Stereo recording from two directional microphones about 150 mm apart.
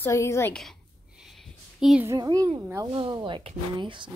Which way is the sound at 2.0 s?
25° right (ahead or behind).